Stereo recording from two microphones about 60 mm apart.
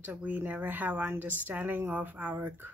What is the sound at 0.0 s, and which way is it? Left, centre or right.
A woman's voice, right.